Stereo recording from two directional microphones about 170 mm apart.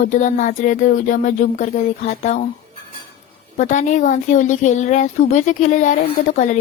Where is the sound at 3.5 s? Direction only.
45° left (ahead or behind).